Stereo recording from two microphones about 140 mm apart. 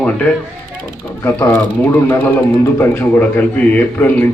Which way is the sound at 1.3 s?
20° left (ahead or behind).